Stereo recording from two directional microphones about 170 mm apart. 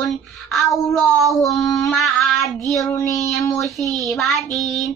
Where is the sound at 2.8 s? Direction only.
15° left (ahead or behind).